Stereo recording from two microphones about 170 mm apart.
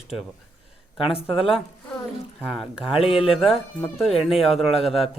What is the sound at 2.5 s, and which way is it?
Speech, centre (ahead or behind).